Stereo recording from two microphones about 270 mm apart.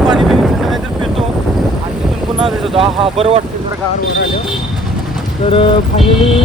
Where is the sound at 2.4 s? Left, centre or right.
Centre.